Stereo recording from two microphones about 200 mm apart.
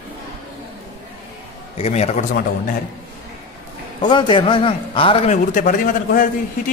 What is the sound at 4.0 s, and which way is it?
A man's voice, 25° left (ahead or behind).